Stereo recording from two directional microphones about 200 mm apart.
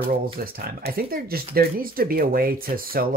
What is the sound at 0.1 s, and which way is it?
Speech, 50° right (ahead or behind).